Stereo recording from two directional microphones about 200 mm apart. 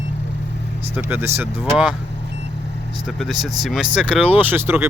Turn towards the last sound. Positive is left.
turn(degrees=-10)  # may be behind; listen again after turning